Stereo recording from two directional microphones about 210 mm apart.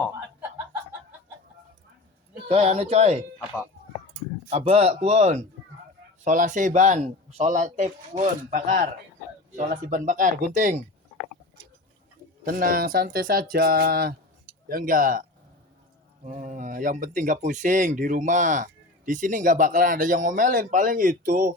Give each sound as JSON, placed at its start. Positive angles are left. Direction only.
{"t": 2.5, "sound": "speech", "side_deg": -30}
{"t": 4.5, "sound": "speech", "side_deg": -30}
{"t": 12.5, "sound": "speech", "side_deg": -45}